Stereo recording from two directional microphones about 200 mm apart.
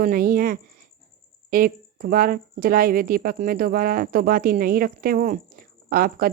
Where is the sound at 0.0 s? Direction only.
45° right (ahead or behind).